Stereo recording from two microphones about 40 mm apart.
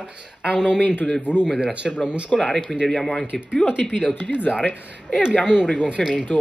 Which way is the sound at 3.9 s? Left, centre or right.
Left.